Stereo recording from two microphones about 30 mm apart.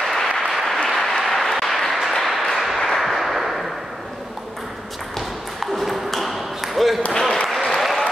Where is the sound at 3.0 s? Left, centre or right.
Centre.